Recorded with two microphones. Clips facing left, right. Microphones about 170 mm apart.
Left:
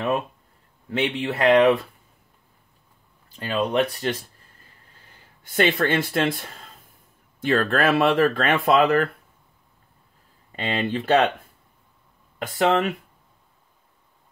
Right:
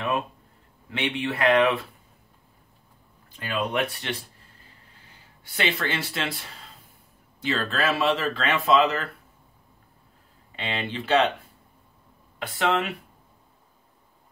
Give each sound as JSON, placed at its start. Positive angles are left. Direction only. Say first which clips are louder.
{"t": 0.8, "sound": "speech", "louder": "left 3 dB", "side_deg": 45}
{"t": 3.3, "sound": "speech", "louder": "left 4 dB", "side_deg": 35}
{"t": 5.4, "sound": "speech", "louder": "left 7 dB", "side_deg": 50}
{"t": 10.5, "sound": "speech", "louder": "left 6 dB", "side_deg": 50}
{"t": 12.4, "sound": "speech", "louder": "left 4 dB", "side_deg": 45}